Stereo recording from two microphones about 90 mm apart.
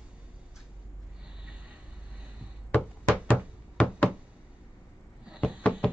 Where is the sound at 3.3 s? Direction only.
15° left (ahead or behind).